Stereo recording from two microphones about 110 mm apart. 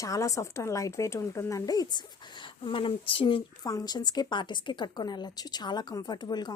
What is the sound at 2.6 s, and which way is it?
Speech, 55° left (ahead or behind).